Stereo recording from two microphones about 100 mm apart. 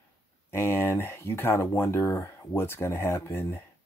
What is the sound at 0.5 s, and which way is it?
Speech, 25° left (ahead or behind).